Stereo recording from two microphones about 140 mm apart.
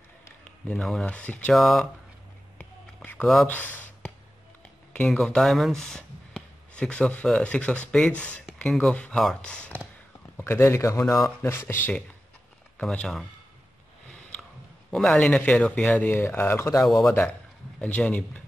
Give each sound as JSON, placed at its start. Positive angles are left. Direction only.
{"t": 0.7, "sound": "speech", "side_deg": 5}
{"t": 3.0, "sound": "a sound", "side_deg": 5}
{"t": 4.9, "sound": "speech", "side_deg": 5}
{"t": 10.3, "sound": "speech", "side_deg": 20}
{"t": 14.9, "sound": "speech", "side_deg": 5}
{"t": 16.8, "sound": "a man's voice", "side_deg": 0}